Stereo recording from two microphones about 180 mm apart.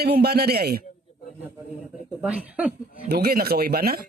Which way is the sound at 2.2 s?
5° right (ahead or behind).